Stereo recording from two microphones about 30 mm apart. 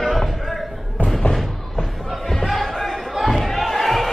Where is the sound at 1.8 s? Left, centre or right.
Centre.